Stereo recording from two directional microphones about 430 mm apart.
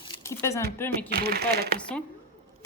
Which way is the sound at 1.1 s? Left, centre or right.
Right.